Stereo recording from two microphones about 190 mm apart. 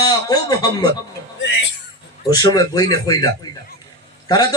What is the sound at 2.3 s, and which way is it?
A man's voice, 20° left (ahead or behind).